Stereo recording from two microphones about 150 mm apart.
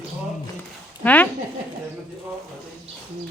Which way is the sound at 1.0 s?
10° left (ahead or behind).